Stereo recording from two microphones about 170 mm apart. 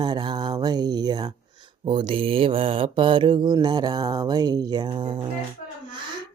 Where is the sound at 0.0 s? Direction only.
25° right (ahead or behind).